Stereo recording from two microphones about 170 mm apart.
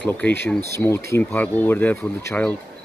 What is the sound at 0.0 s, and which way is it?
Speech, 10° left (ahead or behind).